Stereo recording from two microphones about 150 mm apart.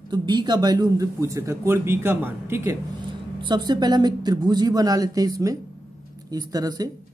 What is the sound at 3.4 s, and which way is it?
A man's voice, 30° right (ahead or behind).